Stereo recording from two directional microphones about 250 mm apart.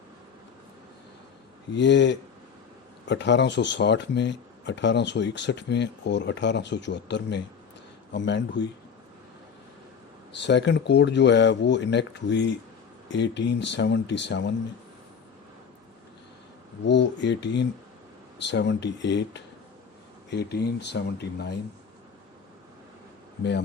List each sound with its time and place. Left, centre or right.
1.7 s speech: left
10.4 s speech: left
16.8 s speech: left
23.4 s speech: left